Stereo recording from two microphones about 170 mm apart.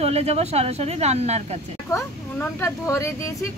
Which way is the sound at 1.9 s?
15° left (ahead or behind).